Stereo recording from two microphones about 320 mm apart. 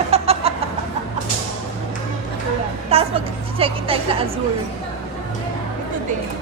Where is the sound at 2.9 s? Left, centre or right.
Centre.